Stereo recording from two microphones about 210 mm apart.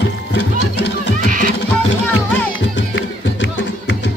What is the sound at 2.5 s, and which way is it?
Music, 60° left (ahead or behind).